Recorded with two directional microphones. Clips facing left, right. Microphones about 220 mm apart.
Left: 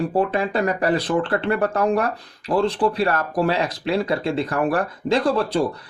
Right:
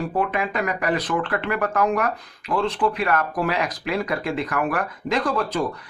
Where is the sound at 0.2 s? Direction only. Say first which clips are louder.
Left 3 dB; 30° left (ahead or behind).